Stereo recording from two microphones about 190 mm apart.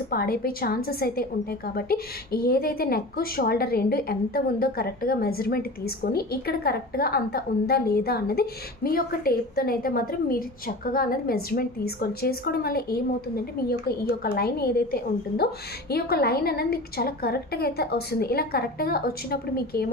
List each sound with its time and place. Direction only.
0.1 s a woman's voice: 55° left (ahead or behind)